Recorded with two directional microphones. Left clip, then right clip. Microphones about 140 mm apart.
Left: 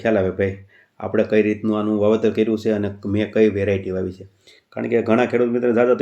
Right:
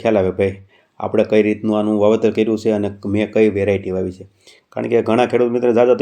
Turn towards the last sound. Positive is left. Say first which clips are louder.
# right 4 dB
turn(degrees=-35)  # may be behind; listen again after turning